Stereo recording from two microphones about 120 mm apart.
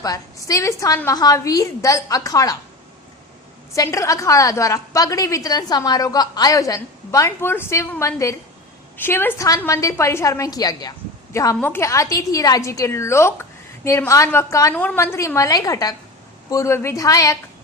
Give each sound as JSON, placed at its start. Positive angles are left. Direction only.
{"t": 0.0, "sound": "a woman's voice", "side_deg": 30}
{"t": 3.8, "sound": "a woman's voice", "side_deg": 25}